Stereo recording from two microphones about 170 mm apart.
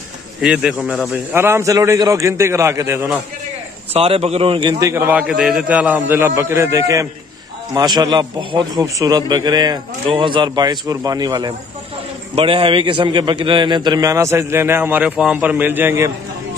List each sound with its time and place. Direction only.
0.4 s a man's voice: 5° right (ahead or behind)
3.9 s a man's voice: 35° right (ahead or behind); by 16.1 s 15° right (ahead or behind)